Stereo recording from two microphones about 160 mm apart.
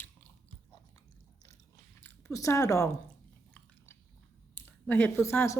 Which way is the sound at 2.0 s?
15° left (ahead or behind).